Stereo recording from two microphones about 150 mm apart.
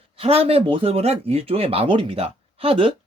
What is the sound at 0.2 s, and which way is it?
Speech, 40° right (ahead or behind).